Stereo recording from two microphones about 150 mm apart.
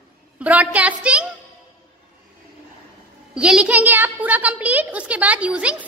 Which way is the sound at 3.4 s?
5° right (ahead or behind).